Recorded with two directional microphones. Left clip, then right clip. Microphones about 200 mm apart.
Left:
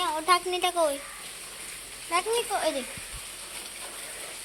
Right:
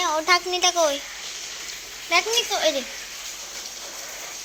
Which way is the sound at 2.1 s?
20° right (ahead or behind).